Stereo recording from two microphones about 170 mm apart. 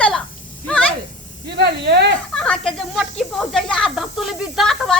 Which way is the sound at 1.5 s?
80° right.